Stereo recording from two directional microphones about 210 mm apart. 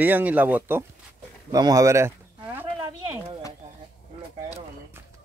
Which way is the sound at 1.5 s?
15° right (ahead or behind).